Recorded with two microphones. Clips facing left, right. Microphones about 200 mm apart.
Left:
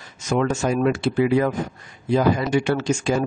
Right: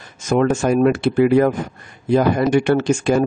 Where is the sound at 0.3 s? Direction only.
50° right (ahead or behind).